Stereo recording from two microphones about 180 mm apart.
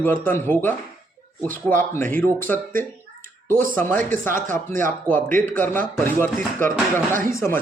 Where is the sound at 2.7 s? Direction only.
50° right (ahead or behind).